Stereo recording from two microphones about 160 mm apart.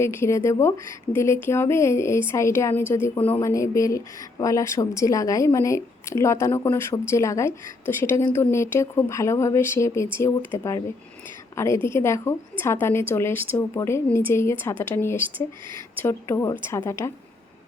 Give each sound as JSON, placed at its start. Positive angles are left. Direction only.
{"t": 0.0, "sound": "a woman's voice", "side_deg": 15}